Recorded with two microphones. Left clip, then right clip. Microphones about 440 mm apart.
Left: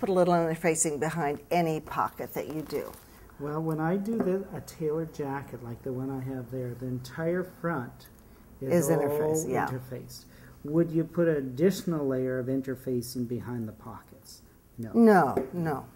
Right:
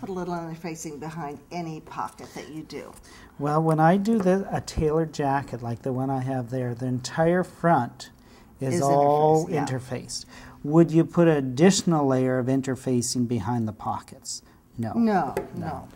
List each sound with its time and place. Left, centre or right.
0.0 s a woman's voice: left
3.4 s speech: right
8.8 s a woman's voice: centre
9.7 s speech: right
15.0 s a woman's voice: left